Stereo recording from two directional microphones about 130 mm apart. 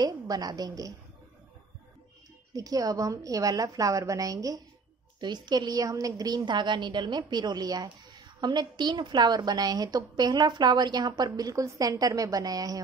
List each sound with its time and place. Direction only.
0.0 s a woman's voice: 30° right (ahead or behind)
2.5 s a woman's voice: 30° right (ahead or behind)